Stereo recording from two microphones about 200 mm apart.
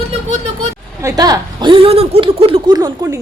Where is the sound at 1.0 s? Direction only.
20° right (ahead or behind).